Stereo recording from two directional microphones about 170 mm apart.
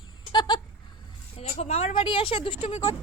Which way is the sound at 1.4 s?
40° left (ahead or behind).